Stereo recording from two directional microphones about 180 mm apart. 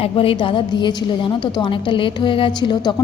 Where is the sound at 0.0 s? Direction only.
30° left (ahead or behind).